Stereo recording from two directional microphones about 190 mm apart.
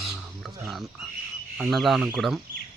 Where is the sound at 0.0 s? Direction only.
Centre (ahead or behind).